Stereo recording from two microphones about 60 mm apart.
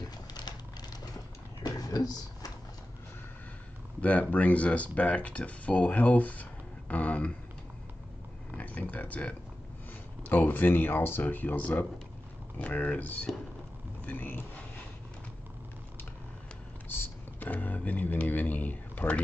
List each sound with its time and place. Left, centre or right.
1.8 s a sound: left
4.0 s speech: left
8.5 s speech: left
16.9 s speech: left